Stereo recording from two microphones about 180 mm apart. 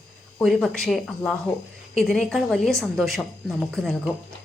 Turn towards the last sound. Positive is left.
turn(degrees=0)  # may be behind; listen again after turning